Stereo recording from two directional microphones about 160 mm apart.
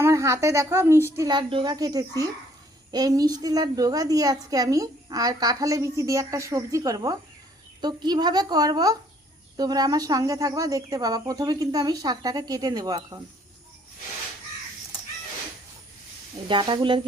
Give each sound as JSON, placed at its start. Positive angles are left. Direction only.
{"t": 0.0, "sound": "a woman's voice", "side_deg": -20}
{"t": 16.5, "sound": "a woman's voice", "side_deg": -30}